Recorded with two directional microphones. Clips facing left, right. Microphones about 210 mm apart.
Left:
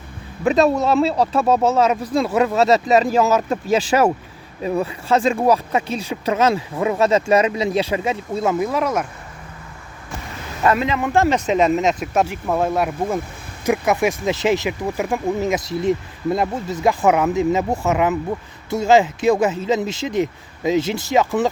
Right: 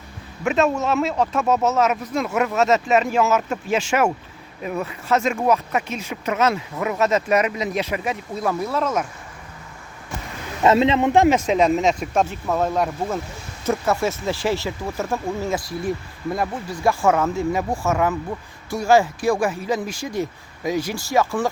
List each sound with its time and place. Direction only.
0.4 s speech: 35° left (ahead or behind); by 9.0 s 10° left (ahead or behind)
10.6 s speech: 25° right (ahead or behind)
11.4 s speech: centre (ahead or behind); by 21.5 s 20° left (ahead or behind)